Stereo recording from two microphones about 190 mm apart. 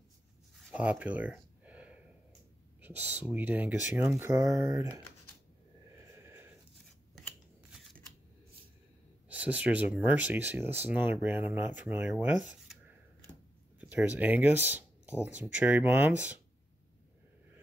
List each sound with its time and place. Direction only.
0.7 s speech: 5° right (ahead or behind)
4.3 s speech: 20° right (ahead or behind)
6.1 s a sound: 15° right (ahead or behind)
9.3 s speech: 5° right (ahead or behind)
13.7 s speech: 10° right (ahead or behind)